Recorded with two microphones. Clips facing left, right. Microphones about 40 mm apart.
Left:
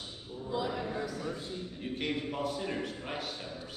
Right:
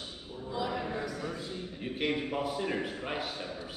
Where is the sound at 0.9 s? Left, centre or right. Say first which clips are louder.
Even; right.